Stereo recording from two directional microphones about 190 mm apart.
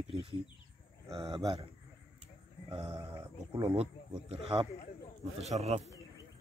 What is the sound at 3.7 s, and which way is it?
Speech, 30° right (ahead or behind).